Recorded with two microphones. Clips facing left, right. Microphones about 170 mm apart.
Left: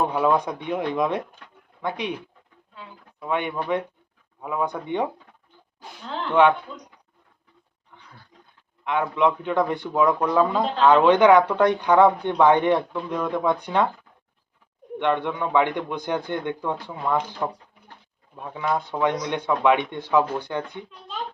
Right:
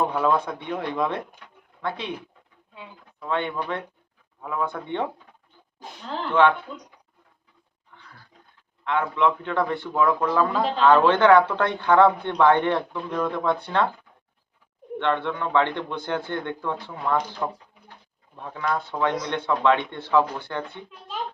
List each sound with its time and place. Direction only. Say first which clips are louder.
0.1 s a man's voice: left 2 dB; 15° left (ahead or behind)
3.2 s a man's voice: left 1 dB; 15° left (ahead or behind)
6.4 s a man's voice: left 2 dB; 15° left (ahead or behind)
8.8 s a man's voice: left 1 dB; 15° left (ahead or behind)
14.9 s a man's voice: left 1 dB; 15° left (ahead or behind)